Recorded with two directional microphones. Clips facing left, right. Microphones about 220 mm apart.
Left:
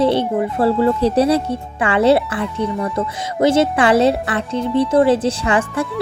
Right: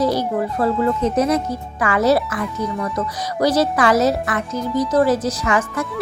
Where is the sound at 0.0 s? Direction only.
30° left (ahead or behind).